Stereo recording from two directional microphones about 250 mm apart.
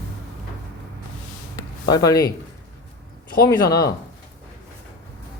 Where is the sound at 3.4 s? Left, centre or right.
Centre.